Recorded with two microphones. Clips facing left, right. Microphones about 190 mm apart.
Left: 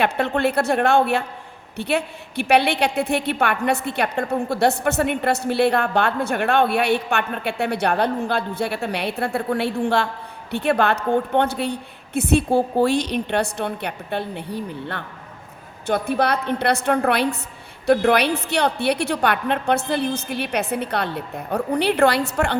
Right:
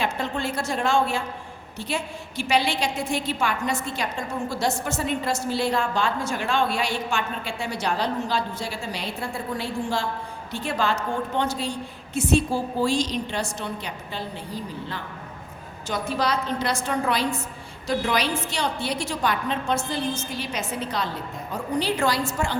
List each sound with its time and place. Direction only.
0.0 s a woman's voice: 65° left (ahead or behind)